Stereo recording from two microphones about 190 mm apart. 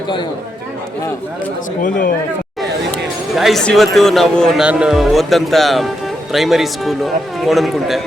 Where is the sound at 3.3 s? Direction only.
Centre (ahead or behind).